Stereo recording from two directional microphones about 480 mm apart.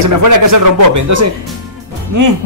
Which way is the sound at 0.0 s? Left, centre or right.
Right.